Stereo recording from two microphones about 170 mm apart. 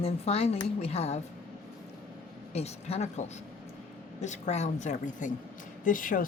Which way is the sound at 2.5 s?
40° left (ahead or behind).